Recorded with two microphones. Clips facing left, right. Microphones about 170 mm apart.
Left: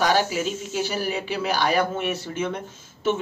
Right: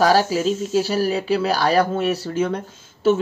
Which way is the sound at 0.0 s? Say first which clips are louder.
Right 5 dB; 35° right (ahead or behind).